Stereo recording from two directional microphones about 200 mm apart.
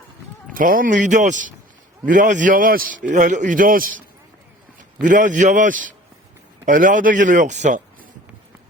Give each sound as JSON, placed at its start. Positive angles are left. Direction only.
{"t": 0.5, "sound": "a man's voice", "side_deg": -45}